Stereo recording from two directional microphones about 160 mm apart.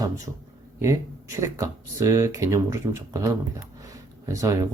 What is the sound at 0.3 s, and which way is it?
Speech, 20° right (ahead or behind).